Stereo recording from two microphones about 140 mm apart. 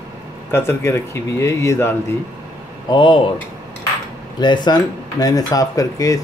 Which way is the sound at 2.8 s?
35° left (ahead or behind).